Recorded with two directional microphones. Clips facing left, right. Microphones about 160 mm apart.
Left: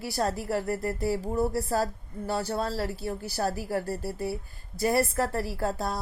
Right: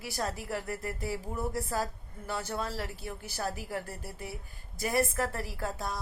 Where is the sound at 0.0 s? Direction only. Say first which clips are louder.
Left 6 dB; 40° left (ahead or behind).